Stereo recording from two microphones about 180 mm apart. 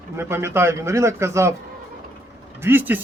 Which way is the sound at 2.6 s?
10° right (ahead or behind).